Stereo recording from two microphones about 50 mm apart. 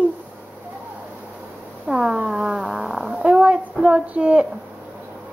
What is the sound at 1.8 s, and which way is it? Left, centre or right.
Cat, centre.